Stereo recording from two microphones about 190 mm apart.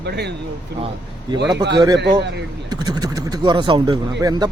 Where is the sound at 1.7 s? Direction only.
25° right (ahead or behind).